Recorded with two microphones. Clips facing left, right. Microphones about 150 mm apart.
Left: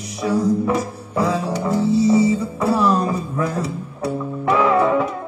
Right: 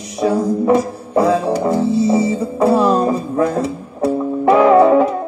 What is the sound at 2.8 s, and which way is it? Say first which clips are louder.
Music: right 4 dB; 30° right (ahead or behind).